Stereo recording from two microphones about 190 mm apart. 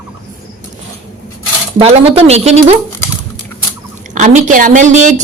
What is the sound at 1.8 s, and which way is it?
A woman's voice, 30° right (ahead or behind).